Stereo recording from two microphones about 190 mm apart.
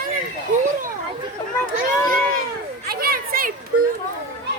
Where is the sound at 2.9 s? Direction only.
55° right (ahead or behind).